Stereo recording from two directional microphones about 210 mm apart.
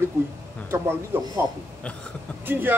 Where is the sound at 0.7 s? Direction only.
10° right (ahead or behind).